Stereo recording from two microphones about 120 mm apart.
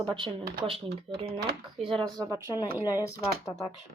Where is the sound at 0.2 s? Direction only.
45° right (ahead or behind); by 3.0 s 15° right (ahead or behind).